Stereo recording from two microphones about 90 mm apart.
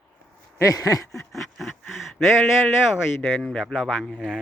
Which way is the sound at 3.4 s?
5° left (ahead or behind).